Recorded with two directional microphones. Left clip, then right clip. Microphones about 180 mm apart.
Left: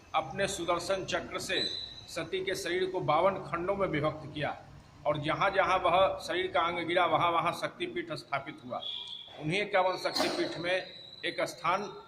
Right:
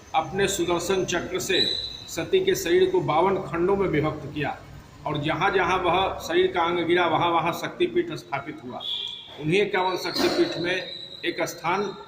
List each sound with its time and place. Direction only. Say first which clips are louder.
0.1 s a man's voice: right 7 dB; 15° left (ahead or behind)